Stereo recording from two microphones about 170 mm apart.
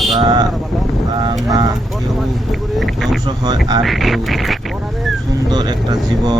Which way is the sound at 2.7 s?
Centre (ahead or behind).